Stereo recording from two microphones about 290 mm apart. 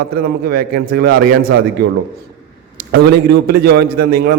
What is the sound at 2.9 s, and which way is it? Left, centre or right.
A man's voice, right.